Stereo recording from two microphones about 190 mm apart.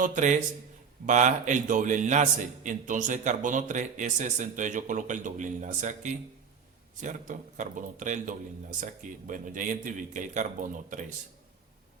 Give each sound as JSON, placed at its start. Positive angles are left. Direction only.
{"t": 0.0, "sound": "a man's voice", "side_deg": -40}